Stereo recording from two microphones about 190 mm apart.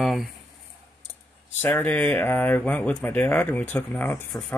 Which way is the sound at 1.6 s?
10° left (ahead or behind).